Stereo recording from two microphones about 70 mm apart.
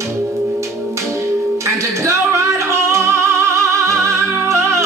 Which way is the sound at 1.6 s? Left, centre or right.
Right.